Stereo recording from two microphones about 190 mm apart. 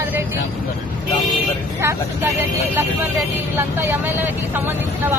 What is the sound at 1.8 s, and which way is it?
Speech, 15° right (ahead or behind).